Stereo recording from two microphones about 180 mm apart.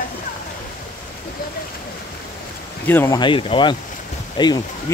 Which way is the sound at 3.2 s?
30° left (ahead or behind).